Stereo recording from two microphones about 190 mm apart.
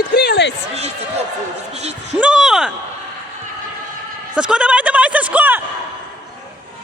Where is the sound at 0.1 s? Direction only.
60° left (ahead or behind).